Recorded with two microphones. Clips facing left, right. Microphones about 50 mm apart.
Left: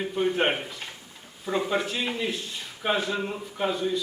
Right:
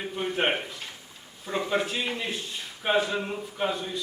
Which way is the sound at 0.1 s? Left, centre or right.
Centre.